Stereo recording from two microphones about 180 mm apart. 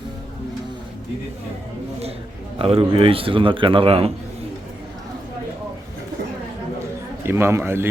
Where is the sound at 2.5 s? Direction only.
30° right (ahead or behind).